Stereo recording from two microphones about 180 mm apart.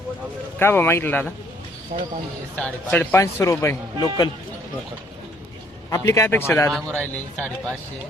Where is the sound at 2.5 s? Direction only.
10° left (ahead or behind).